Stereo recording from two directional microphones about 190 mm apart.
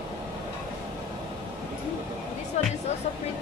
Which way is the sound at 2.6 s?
35° left (ahead or behind).